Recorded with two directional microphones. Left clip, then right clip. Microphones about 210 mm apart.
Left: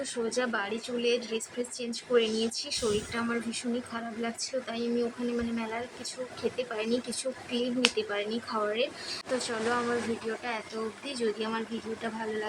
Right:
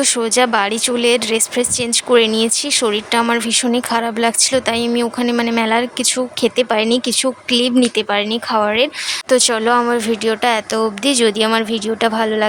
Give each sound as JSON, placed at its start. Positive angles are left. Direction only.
{"t": 0.0, "sound": "speech", "side_deg": -55}
{"t": 11.0, "sound": "speech", "side_deg": -55}